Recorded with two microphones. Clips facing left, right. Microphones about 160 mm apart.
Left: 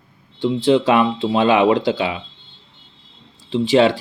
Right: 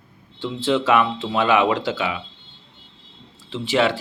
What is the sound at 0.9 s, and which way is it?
Speech, 30° left (ahead or behind).